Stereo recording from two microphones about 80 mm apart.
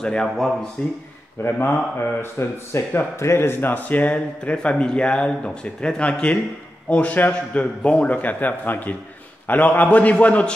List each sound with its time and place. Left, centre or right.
0.0 s speech: centre
1.4 s a man's voice: left; by 10.5 s centre